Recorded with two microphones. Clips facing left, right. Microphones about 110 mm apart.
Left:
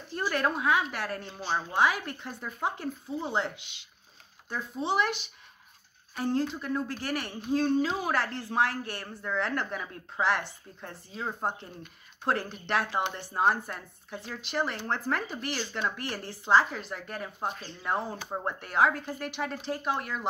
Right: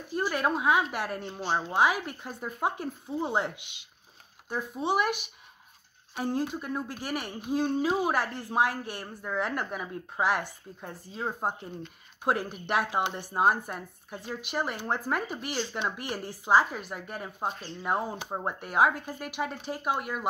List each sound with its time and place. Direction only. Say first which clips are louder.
0.3 s speech: even; 10° right (ahead or behind)
6.1 s speech: left 1 dB; 15° right (ahead or behind)